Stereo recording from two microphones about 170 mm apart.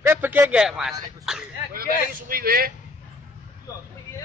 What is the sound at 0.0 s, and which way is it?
Speech, 10° right (ahead or behind).